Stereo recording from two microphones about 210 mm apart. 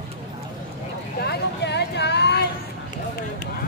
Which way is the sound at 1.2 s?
55° left (ahead or behind).